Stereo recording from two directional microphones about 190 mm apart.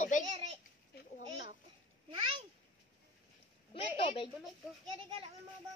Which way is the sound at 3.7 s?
30° left (ahead or behind).